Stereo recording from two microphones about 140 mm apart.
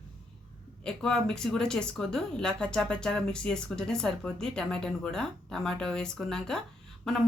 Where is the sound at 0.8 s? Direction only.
5° left (ahead or behind).